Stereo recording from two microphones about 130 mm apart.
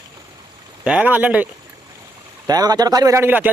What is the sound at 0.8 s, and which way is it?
Speech, 10° right (ahead or behind).